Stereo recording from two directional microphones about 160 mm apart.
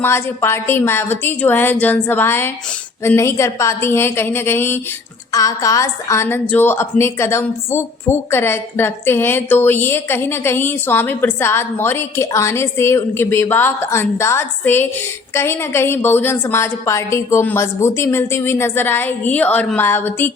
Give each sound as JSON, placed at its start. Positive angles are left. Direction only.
{"t": 0.0, "sound": "a woman's voice", "side_deg": 15}